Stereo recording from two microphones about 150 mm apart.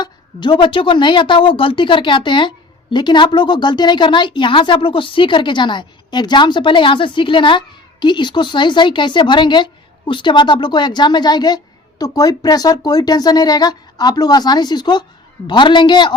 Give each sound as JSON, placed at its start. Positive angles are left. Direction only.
{"t": 0.0, "sound": "a woman's voice", "side_deg": 30}